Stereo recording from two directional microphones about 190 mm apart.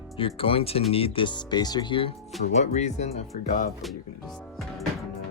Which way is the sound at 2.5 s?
35° left (ahead or behind).